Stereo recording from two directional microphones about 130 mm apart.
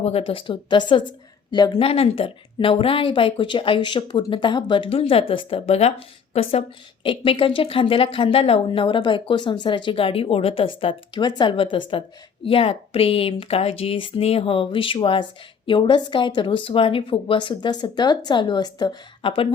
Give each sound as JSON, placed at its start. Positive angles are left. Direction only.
{"t": 0.0, "sound": "speech", "side_deg": 45}
{"t": 1.8, "sound": "speech", "side_deg": 45}